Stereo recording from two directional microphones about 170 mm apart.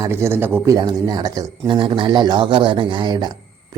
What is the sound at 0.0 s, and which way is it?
Speech, 15° right (ahead or behind).